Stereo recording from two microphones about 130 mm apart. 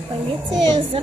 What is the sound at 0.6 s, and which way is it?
Speech, 35° right (ahead or behind).